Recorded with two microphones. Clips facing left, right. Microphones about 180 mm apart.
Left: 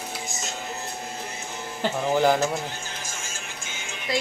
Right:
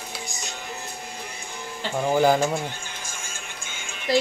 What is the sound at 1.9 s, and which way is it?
Speech, 10° right (ahead or behind).